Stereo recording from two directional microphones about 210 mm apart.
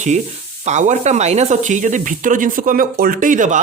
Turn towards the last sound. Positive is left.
turn(degrees=-35)  # may be behind; listen again after turning